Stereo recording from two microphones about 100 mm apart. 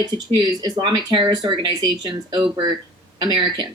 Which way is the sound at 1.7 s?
40° right (ahead or behind).